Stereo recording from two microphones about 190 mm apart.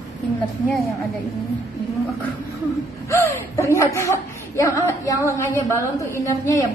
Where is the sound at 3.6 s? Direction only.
15° left (ahead or behind).